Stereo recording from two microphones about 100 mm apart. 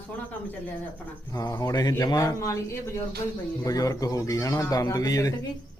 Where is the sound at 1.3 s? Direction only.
40° left (ahead or behind).